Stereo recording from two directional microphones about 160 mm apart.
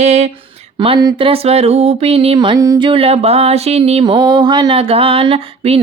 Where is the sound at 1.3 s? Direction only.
40° right (ahead or behind).